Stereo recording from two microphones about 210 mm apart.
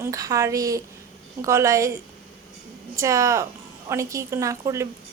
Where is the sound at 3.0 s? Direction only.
15° right (ahead or behind).